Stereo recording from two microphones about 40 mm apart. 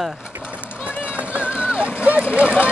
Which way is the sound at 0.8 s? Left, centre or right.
Right.